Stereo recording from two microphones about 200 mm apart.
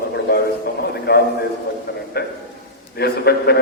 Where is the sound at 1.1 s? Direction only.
50° left (ahead or behind).